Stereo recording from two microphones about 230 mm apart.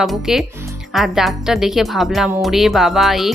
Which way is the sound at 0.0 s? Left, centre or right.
Centre.